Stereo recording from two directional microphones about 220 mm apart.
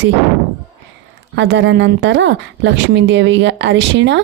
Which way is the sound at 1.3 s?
55° right (ahead or behind).